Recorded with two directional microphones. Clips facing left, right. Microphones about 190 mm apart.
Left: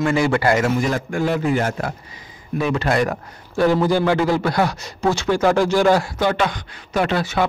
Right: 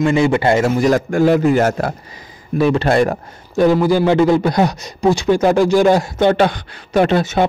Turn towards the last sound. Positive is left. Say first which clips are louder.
# right 6 dB
turn(degrees=-20)  # may be behind; listen again after turning